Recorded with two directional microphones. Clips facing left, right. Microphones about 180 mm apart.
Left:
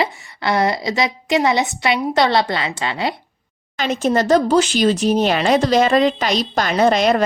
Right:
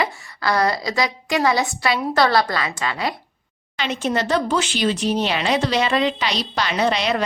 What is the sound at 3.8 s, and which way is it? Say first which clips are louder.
Speech: left 5 dB; 45° left (ahead or behind).